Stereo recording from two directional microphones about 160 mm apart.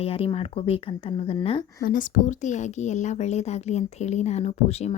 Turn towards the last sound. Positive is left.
turn(degrees=40)  # may be behind; listen again after turning